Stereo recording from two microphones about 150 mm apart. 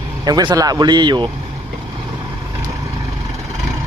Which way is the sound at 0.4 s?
25° right (ahead or behind).